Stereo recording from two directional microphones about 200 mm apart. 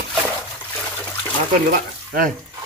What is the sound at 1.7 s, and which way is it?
Speech, 45° right (ahead or behind).